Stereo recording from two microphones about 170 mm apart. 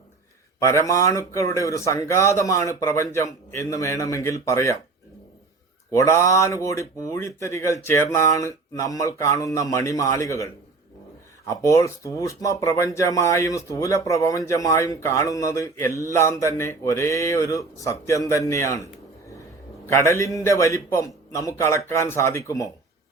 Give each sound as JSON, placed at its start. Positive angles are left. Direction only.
{"t": 0.6, "sound": "speech", "side_deg": 20}
{"t": 5.9, "sound": "speech", "side_deg": 15}
{"t": 19.9, "sound": "speech", "side_deg": 15}